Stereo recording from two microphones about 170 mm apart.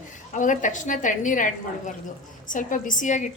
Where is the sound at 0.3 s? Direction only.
50° left (ahead or behind).